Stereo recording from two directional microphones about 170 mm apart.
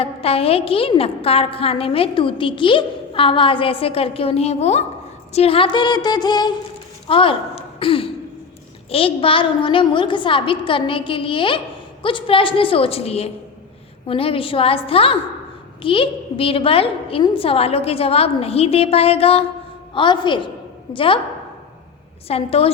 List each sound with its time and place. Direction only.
0.0 s a woman's voice: 35° left (ahead or behind)
5.3 s a sound: 35° left (ahead or behind)
7.1 s a woman's voice: 30° left (ahead or behind)
19.9 s a sound: 30° left (ahead or behind)
20.9 s a woman's voice: 30° left (ahead or behind)
22.3 s a woman's voice: 35° left (ahead or behind)